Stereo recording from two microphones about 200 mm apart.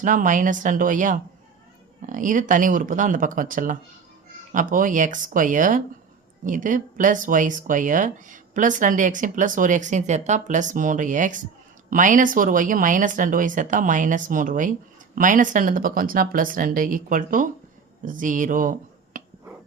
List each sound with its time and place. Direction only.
0.0 s speech: 40° right (ahead or behind)